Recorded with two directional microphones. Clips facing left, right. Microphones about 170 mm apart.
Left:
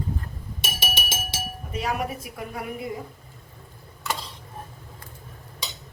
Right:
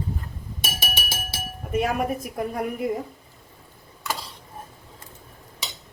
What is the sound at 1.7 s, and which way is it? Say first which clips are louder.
A woman's voice: right 5 dB; 50° right (ahead or behind).